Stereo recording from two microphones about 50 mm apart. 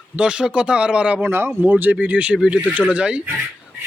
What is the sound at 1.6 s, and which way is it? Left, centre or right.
Speech, right.